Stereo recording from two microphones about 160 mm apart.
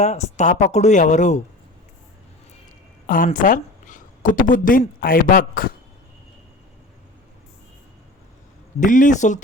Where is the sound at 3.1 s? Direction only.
60° left (ahead or behind).